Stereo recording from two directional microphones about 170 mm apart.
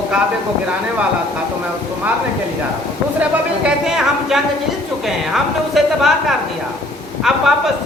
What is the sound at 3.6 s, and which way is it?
Speech, 5° right (ahead or behind).